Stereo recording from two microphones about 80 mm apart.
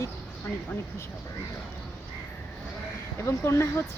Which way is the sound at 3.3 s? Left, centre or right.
Left.